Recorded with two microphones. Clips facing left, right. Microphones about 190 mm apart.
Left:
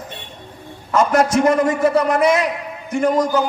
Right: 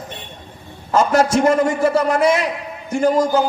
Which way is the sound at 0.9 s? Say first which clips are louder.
Even; 30° right (ahead or behind).